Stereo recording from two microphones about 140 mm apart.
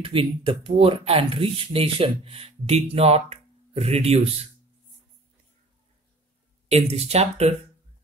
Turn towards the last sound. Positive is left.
turn(degrees=-50)  # may be behind; listen again after turning